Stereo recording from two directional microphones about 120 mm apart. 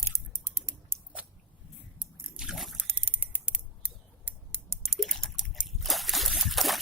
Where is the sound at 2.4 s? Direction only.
5° right (ahead or behind).